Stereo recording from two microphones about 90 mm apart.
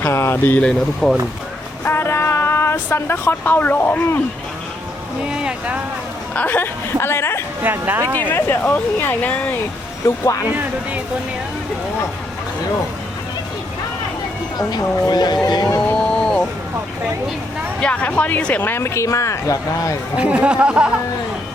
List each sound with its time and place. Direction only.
0.0 s speech: 30° left (ahead or behind)
1.0 s speech: centre (ahead or behind)
1.8 s a sound: 25° left (ahead or behind)
5.3 s a sound: 10° right (ahead or behind)
6.3 s a woman's voice: 20° left (ahead or behind)
7.6 s speech: 20° right (ahead or behind)
8.3 s speech: 20° left (ahead or behind)
10.0 s speech: 30° left (ahead or behind)
10.4 s speech: 20° right (ahead or behind)
14.7 s speech: 45° left (ahead or behind)
15.9 s music: 10° left (ahead or behind)
17.7 s speech: 10° left (ahead or behind); by 20.0 s 35° left (ahead or behind)
20.1 s speech: 15° right (ahead or behind)